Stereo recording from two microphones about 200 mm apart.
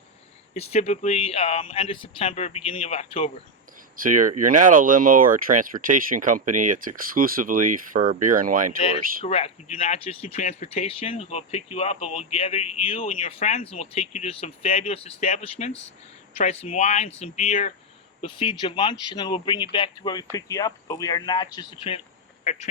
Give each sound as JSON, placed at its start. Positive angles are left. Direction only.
{"t": 0.5, "sound": "speech", "side_deg": 30}
{"t": 3.9, "sound": "speech", "side_deg": -40}
{"t": 9.2, "sound": "speech", "side_deg": 30}